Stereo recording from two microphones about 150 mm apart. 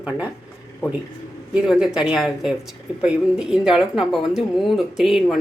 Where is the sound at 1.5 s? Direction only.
5° right (ahead or behind).